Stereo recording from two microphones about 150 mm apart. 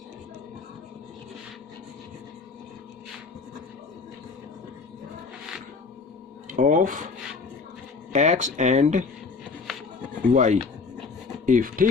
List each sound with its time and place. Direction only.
6.5 s a sound: 60° right (ahead or behind)
8.1 s speech: 50° right (ahead or behind)
10.3 s speech: 55° right (ahead or behind)